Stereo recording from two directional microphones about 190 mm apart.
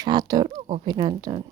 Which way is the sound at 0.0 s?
20° right (ahead or behind).